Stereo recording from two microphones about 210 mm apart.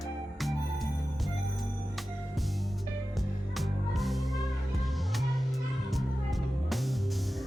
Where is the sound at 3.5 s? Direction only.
Centre (ahead or behind).